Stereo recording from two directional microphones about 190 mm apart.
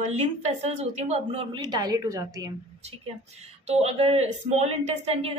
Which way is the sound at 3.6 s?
35° right (ahead or behind).